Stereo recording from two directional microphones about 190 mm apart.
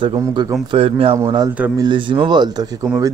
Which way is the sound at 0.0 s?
25° right (ahead or behind).